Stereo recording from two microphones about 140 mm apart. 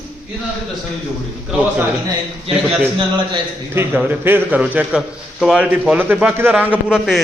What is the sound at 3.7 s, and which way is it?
A man's voice, 15° right (ahead or behind).